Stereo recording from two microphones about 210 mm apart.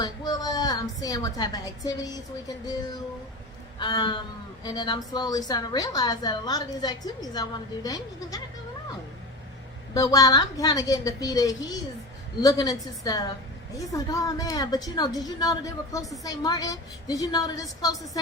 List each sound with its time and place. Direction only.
0.0 s a woman's voice: 20° left (ahead or behind)
3.8 s a woman's voice: 20° left (ahead or behind)
9.9 s a woman's voice: 15° left (ahead or behind)